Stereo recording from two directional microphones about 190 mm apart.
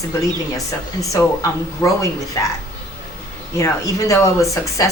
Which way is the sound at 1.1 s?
15° left (ahead or behind).